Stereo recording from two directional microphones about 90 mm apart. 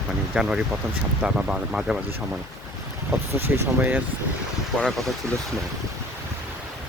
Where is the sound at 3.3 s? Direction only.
25° right (ahead or behind).